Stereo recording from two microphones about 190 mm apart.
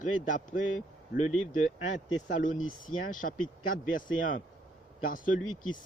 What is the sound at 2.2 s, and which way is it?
Speech, 45° left (ahead or behind).